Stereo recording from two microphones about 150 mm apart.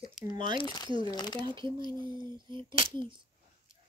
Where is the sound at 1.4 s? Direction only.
30° right (ahead or behind).